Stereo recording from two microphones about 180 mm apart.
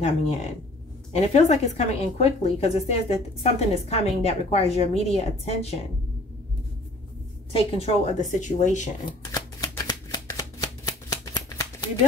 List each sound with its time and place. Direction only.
1.1 s a woman's voice: 40° left (ahead or behind)
7.5 s a woman's voice: 35° left (ahead or behind)
9.3 s shuffling cards: 20° left (ahead or behind)